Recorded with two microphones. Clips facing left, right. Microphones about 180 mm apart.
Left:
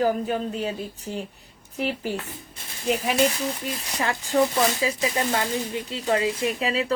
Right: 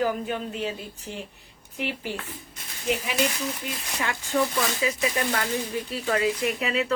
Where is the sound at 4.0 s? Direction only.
40° left (ahead or behind).